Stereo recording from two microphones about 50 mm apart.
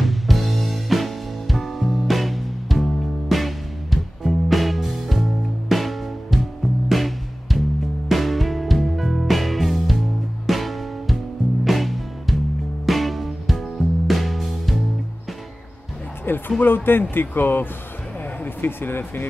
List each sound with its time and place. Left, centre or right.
0.0 s music: centre
16.3 s speech: left